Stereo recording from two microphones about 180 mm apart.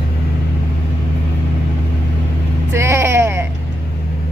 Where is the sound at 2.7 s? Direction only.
15° right (ahead or behind).